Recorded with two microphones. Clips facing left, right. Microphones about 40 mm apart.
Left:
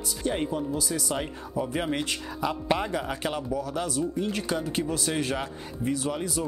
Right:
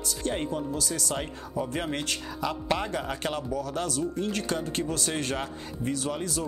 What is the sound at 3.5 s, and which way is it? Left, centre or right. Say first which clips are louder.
Speech: left 1 dB; centre.